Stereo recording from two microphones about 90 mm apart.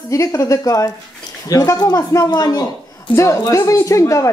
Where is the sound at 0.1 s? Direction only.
35° left (ahead or behind).